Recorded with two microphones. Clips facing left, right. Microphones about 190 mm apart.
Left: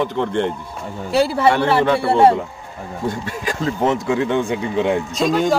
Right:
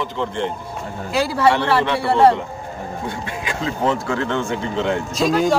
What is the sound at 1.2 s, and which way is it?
Speech, 25° left (ahead or behind).